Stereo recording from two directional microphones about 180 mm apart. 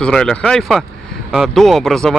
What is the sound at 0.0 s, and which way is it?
Speech, 5° left (ahead or behind).